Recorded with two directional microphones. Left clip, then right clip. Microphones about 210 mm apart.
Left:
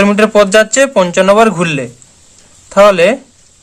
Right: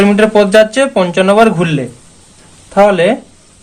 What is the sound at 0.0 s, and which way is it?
Speech, 30° left (ahead or behind).